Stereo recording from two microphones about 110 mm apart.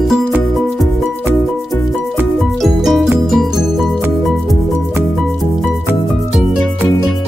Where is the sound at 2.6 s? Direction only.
Centre (ahead or behind).